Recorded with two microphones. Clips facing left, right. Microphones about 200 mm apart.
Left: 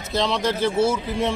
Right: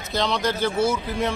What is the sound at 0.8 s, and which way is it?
Speech, 25° left (ahead or behind).